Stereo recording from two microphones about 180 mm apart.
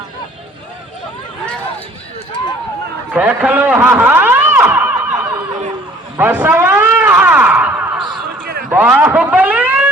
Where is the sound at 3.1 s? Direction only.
10° right (ahead or behind).